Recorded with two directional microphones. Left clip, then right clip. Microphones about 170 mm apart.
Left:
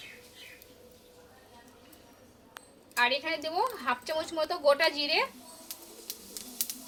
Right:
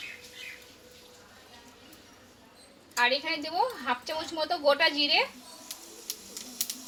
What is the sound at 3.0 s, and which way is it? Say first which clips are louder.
A woman's voice: right 1 dB; 5° right (ahead or behind).